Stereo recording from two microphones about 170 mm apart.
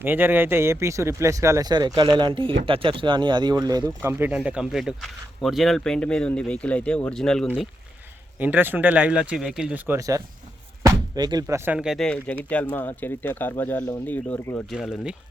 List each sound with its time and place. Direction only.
0.0 s speech: 10° right (ahead or behind)
8.4 s speech: 10° right (ahead or behind); by 14.6 s 15° left (ahead or behind)